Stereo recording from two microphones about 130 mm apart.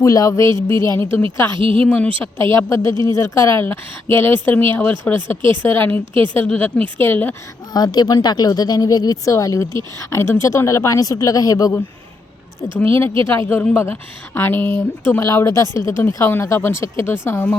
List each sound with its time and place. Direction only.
0.0 s a woman's voice: 25° left (ahead or behind)
1.5 s a woman's voice: 45° right (ahead or behind)
2.2 s a woman's voice: 20° left (ahead or behind)
6.1 s speech: 40° right (ahead or behind)
6.4 s speech: 10° left (ahead or behind)
7.7 s a woman's voice: 30° left (ahead or behind)
12.8 s a woman's voice: 20° left (ahead or behind)